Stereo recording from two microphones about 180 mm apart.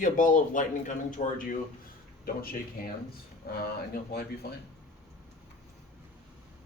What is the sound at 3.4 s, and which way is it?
Speech, 60° left (ahead or behind).